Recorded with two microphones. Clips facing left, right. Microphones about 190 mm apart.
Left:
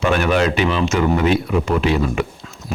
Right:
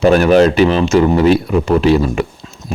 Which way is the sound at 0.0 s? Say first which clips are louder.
Right 8 dB; 40° right (ahead or behind).